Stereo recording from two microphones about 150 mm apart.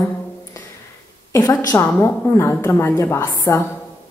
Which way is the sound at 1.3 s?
20° left (ahead or behind).